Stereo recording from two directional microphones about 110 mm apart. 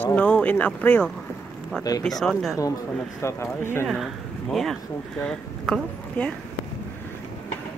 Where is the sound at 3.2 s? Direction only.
25° left (ahead or behind).